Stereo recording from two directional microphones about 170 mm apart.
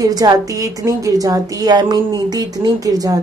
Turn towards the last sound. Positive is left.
turn(degrees=-20)  # may be behind; listen again after turning